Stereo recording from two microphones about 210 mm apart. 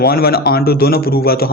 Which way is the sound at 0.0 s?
45° left (ahead or behind).